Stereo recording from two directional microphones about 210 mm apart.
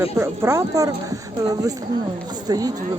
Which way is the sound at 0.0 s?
10° right (ahead or behind).